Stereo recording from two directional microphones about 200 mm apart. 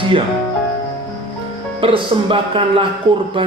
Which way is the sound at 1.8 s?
25° right (ahead or behind).